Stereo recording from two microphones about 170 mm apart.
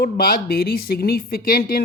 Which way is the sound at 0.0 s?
60° left (ahead or behind).